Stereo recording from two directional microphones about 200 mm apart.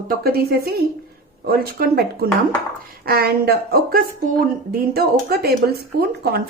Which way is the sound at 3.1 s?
50° right (ahead or behind).